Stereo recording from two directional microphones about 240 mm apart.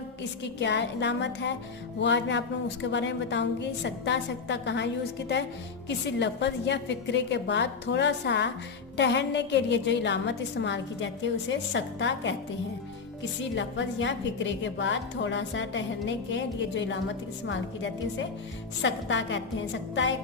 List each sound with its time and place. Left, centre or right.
0.6 s a woman's voice: left
5.9 s a woman's voice: left
13.6 s a woman's voice: left